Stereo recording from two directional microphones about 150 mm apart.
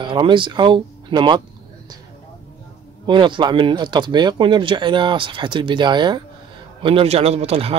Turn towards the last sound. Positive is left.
turn(degrees=-40)  # may be behind; listen again after turning